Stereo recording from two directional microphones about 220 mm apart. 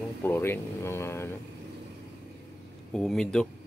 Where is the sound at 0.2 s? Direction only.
10° left (ahead or behind).